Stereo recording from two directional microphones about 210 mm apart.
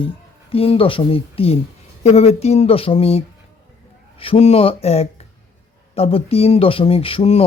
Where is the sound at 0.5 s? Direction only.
25° left (ahead or behind).